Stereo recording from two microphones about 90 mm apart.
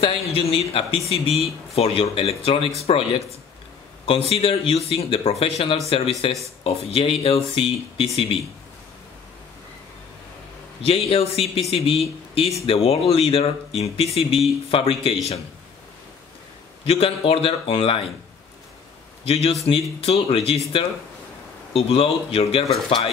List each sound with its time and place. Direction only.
0.0 s speech: 90° left
10.9 s speech: 90° left
16.8 s speech: 90° left
19.2 s a man's voice: 90° left